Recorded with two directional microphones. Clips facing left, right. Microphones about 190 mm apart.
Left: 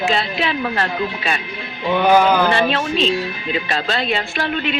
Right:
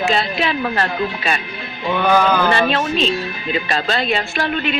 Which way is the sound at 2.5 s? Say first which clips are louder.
Right 1 dB; 45° right (ahead or behind).